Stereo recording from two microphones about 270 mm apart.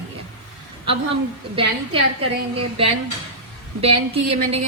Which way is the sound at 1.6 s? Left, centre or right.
Centre.